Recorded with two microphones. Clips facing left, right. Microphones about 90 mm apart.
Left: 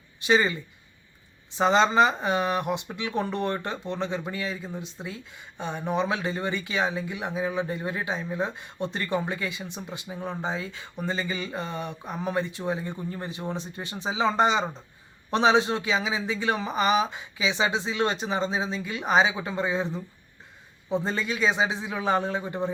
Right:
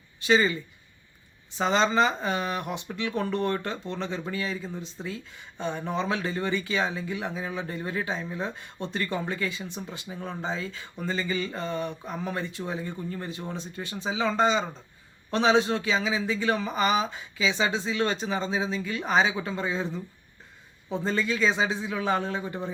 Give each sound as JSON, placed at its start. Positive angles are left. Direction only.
{"t": 1.5, "sound": "speech", "side_deg": 20}